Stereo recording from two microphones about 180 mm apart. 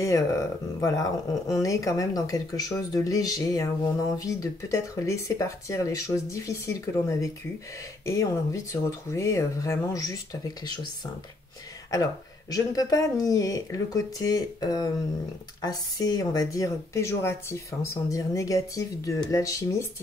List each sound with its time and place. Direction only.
0.0 s speech: 15° left (ahead or behind)
11.9 s speech: 20° left (ahead or behind)